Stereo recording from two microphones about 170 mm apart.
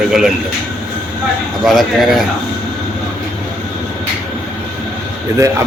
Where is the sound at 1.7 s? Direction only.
Centre (ahead or behind).